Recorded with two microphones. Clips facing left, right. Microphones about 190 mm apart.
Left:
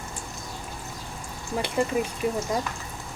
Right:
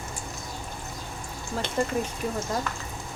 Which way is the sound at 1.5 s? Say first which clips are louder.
Left 2 dB; 15° left (ahead or behind).